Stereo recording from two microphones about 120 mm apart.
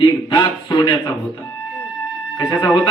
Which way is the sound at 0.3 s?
45° left (ahead or behind).